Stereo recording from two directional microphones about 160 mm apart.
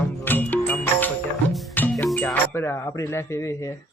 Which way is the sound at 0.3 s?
10° left (ahead or behind).